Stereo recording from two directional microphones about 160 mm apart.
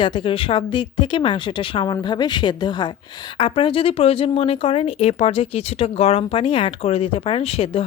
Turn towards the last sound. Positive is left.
turn(degrees=40)  # may be behind; listen again after turning